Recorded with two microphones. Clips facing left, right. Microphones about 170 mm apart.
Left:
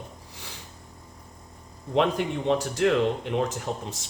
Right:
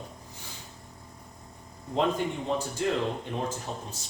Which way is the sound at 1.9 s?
80° left.